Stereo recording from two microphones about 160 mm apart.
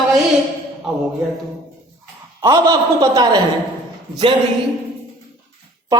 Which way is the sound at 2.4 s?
20° right (ahead or behind).